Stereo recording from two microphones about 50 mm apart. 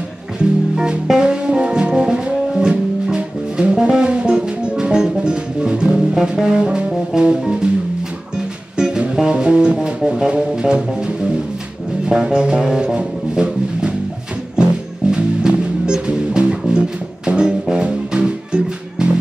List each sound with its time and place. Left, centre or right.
0.4 s music: centre
8.7 s music: centre
12.1 s music: centre